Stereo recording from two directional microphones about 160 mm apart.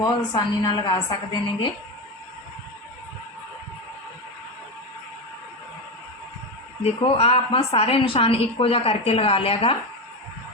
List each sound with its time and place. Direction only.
0.0 s a woman's voice: 25° left (ahead or behind)
6.8 s a woman's voice: 40° left (ahead or behind)